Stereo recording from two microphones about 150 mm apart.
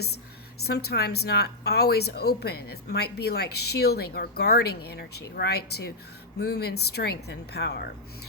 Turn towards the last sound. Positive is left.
turn(degrees=90)